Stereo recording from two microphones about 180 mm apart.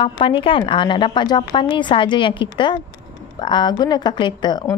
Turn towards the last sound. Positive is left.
turn(degrees=25)  # may be behind; listen again after turning